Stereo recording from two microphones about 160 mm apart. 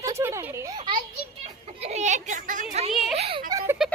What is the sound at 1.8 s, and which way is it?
Speech, 45° right (ahead or behind).